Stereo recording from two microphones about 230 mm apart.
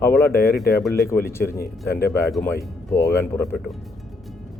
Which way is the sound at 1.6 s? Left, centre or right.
Left.